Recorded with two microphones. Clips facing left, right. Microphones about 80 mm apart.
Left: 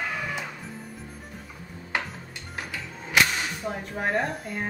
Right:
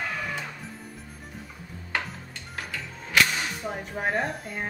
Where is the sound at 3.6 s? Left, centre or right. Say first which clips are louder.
Left 1 dB; centre.